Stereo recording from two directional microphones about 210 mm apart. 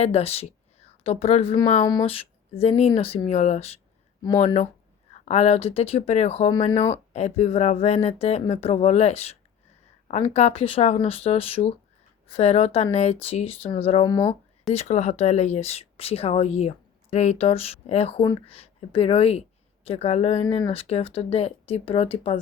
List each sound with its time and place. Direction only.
0.0 s speech: 30° left (ahead or behind)
14.7 s speech: 30° left (ahead or behind)